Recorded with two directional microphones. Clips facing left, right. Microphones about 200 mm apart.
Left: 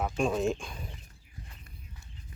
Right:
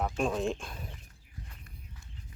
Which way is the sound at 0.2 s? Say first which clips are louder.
Left 4 dB; centre (ahead or behind).